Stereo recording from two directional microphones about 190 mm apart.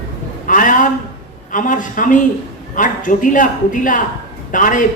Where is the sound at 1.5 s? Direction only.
45° left (ahead or behind).